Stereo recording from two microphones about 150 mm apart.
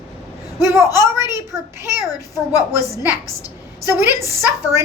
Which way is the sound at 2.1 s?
25° left (ahead or behind).